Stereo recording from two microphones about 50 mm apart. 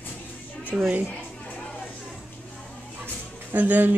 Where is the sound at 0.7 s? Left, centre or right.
Centre.